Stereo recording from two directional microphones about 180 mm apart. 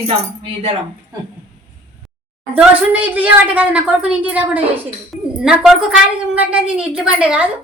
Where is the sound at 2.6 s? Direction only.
10° right (ahead or behind).